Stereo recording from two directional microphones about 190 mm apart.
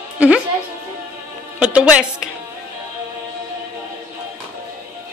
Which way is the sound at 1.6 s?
5° right (ahead or behind).